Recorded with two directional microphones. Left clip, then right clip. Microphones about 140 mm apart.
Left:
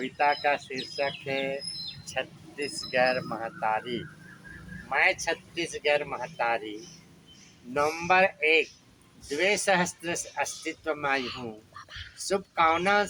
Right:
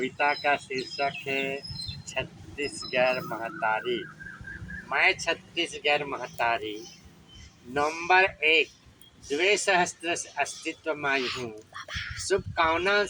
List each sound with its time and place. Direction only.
0.0 s speech: 20° left (ahead or behind)
11.2 s speech: 25° right (ahead or behind)
12.3 s speech: 25° left (ahead or behind)